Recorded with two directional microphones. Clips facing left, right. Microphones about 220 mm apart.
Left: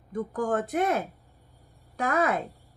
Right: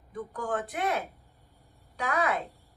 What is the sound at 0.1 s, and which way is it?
A woman's voice, 45° left (ahead or behind).